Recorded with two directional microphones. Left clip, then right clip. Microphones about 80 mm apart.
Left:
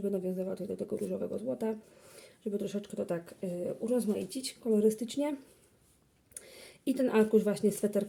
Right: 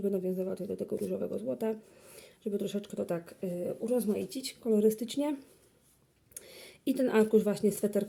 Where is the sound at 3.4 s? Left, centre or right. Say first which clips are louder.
Right 1 dB; centre; by 5.3 s right.